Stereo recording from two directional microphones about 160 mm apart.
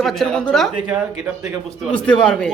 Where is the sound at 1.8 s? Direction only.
5° left (ahead or behind).